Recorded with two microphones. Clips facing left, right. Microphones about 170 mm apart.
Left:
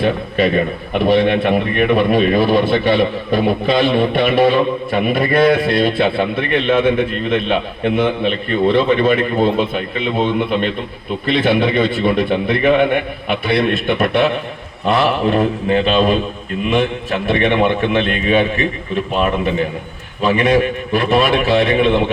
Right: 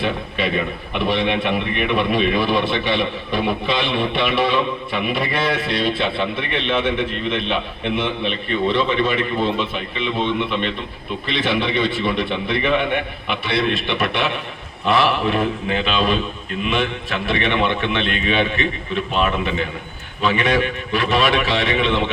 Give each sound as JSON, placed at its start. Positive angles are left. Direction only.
{"t": 0.0, "sound": "a man's voice", "side_deg": 45}